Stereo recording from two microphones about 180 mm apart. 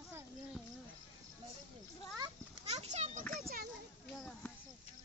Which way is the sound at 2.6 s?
35° right (ahead or behind).